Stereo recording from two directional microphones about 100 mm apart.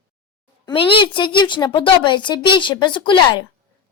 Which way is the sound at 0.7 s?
55° left (ahead or behind).